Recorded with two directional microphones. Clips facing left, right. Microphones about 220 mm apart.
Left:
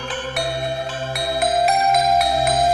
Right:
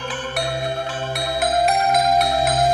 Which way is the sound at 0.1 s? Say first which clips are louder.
Left 1 dB; centre (ahead or behind).